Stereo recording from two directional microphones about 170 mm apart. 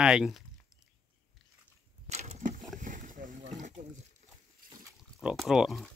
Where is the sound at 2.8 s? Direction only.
50° right (ahead or behind).